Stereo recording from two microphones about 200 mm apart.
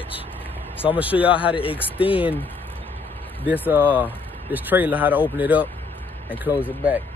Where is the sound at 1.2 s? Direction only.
5° right (ahead or behind).